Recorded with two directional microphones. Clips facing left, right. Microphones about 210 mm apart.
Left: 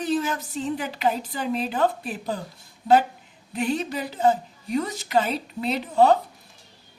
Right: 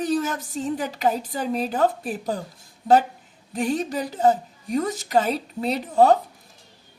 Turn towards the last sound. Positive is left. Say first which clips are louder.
# right 1 dB
turn(degrees=-45)  # may be behind; listen again after turning